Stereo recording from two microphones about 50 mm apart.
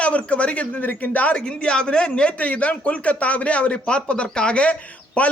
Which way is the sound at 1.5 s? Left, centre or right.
Centre.